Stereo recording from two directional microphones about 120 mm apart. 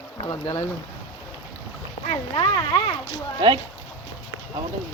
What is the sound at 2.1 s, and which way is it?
Speech, 40° left (ahead or behind).